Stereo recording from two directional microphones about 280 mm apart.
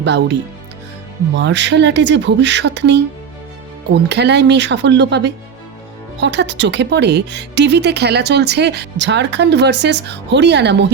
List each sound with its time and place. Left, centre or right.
0.0 s speech: right
1.4 s speech: right